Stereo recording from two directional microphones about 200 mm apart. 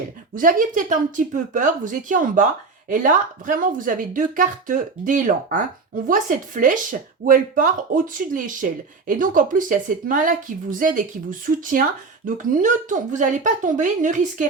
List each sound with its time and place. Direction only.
0.3 s speech: 45° right (ahead or behind)